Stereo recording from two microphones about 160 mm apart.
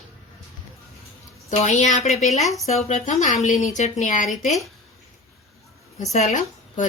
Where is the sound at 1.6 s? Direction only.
45° left (ahead or behind).